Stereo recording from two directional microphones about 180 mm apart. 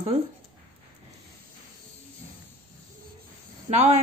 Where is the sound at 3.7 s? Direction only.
35° right (ahead or behind).